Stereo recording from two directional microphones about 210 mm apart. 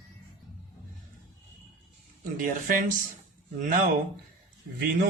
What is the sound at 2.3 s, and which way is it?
Speech, 40° right (ahead or behind).